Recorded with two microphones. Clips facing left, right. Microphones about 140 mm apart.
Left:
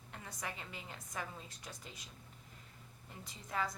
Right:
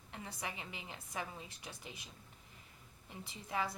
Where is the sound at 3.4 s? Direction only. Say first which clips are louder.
Even; 25° right (ahead or behind).